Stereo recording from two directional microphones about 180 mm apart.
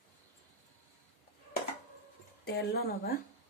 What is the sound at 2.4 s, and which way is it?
Speech, 65° left (ahead or behind).